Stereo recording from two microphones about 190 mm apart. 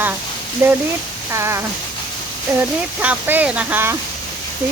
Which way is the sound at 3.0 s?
10° right (ahead or behind).